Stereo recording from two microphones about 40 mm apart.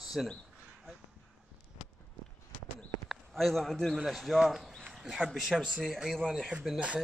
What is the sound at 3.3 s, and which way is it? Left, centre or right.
Speech, centre.